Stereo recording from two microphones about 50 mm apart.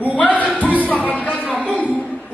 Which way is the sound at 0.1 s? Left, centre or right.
Left.